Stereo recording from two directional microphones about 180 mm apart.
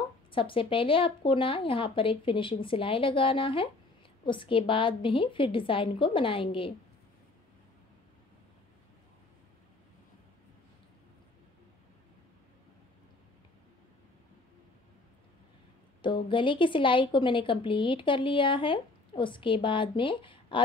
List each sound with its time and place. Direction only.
0.3 s a woman's voice: 30° left (ahead or behind)
16.0 s a woman's voice: 25° left (ahead or behind)